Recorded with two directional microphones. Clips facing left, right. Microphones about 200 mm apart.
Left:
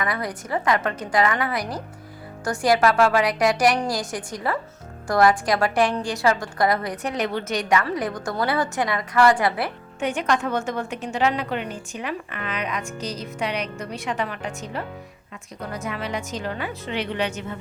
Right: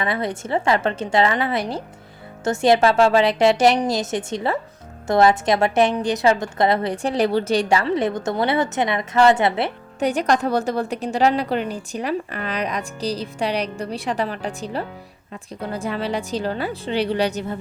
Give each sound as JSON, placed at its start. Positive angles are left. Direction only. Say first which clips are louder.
{"t": 0.0, "sound": "a woman's voice", "louder": "right 4 dB", "side_deg": -25}
{"t": 10.0, "sound": "a woman's voice", "louder": "right 4 dB", "side_deg": -35}